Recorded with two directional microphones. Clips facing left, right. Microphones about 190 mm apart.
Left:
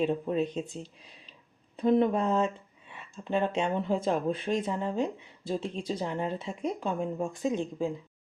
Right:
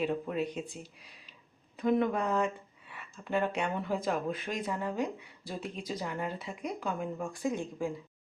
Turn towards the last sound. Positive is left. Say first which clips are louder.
# left 4 dB
turn(degrees=20)  # may be behind; listen again after turning